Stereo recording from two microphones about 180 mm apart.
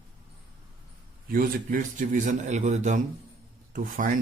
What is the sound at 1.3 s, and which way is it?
A man's voice, 50° right (ahead or behind).